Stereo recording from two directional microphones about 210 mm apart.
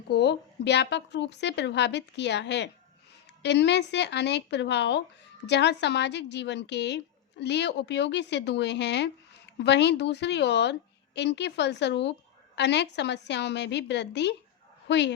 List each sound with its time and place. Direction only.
0.1 s a woman's voice: 55° left (ahead or behind)